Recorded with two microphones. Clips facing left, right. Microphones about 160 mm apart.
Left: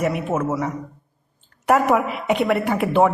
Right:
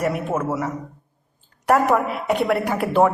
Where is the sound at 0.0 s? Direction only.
5° left (ahead or behind).